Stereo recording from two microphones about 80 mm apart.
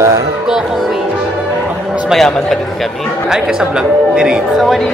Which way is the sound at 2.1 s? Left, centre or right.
Centre.